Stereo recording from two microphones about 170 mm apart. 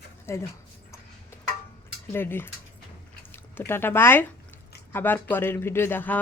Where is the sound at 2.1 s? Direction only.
15° left (ahead or behind).